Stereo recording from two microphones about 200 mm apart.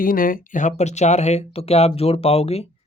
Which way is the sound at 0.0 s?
45° left (ahead or behind).